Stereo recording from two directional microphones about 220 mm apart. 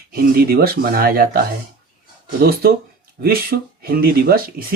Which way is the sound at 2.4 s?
45° right (ahead or behind).